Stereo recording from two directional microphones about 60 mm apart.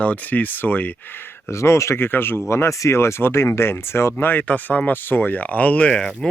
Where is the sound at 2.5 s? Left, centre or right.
Left.